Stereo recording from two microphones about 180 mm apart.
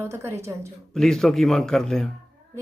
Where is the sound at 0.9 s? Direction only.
5° left (ahead or behind).